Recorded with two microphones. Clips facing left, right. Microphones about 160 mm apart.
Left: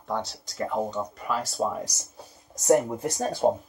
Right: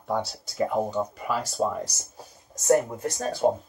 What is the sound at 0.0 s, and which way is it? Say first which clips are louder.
Speech: right 2 dB; 5° right (ahead or behind).